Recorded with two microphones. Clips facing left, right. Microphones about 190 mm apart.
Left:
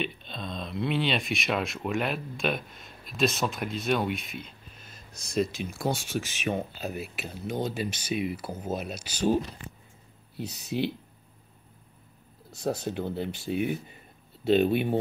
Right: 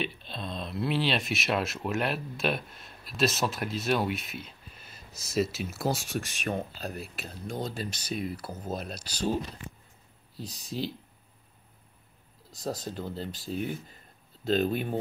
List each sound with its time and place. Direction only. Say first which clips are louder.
0.0 s speech: left 1 dB; centre (ahead or behind)
10.3 s speech: left 5 dB; 65° left (ahead or behind)
12.8 s speech: left 5 dB; 65° left (ahead or behind)